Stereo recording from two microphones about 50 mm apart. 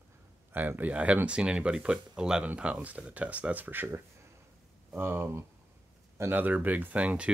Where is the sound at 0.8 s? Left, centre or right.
Right.